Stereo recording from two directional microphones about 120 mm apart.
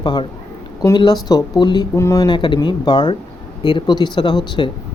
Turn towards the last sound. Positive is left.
turn(degrees=40)  # may be behind; listen again after turning